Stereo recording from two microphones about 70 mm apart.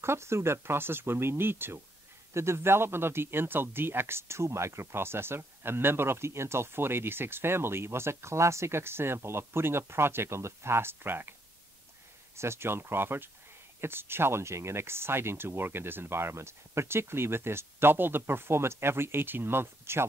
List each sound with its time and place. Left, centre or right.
0.0 s speech: right
12.4 s speech: right